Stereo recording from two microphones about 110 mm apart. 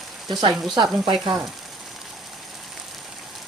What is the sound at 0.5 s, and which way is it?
Speech, centre (ahead or behind).